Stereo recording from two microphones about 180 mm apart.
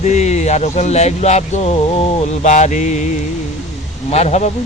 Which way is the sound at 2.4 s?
40° left (ahead or behind).